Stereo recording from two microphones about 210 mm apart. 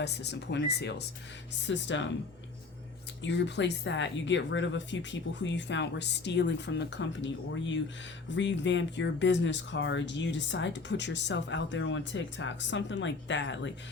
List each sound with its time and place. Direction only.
0.0 s speech: 55° left (ahead or behind)
3.2 s speech: 55° left (ahead or behind)